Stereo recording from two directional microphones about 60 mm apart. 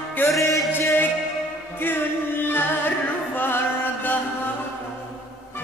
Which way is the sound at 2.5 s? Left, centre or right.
Left.